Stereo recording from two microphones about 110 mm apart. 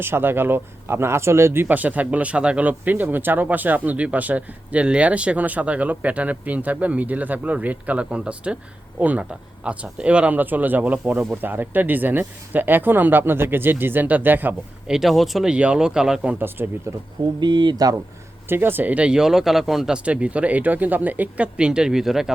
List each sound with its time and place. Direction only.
0.0 s speech: 20° right (ahead or behind)
14.8 s speech: 5° right (ahead or behind); by 16.9 s 20° right (ahead or behind)
17.4 s speech: 40° right (ahead or behind)
18.4 s speech: 20° right (ahead or behind); by 22.3 s 5° right (ahead or behind)